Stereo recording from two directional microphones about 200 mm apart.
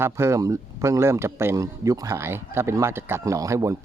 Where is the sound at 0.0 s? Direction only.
15° right (ahead or behind).